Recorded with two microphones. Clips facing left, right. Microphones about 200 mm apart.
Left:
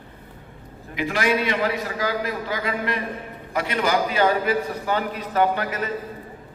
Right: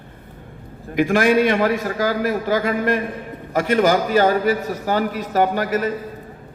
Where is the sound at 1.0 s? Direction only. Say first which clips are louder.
Right 7 dB; 50° right (ahead or behind).